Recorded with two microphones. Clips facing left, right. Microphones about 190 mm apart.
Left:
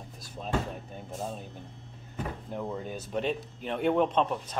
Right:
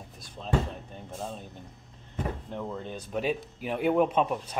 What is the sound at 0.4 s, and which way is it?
Speech, 10° left (ahead or behind).